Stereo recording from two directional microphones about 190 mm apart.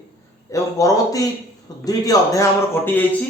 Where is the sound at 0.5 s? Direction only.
15° left (ahead or behind).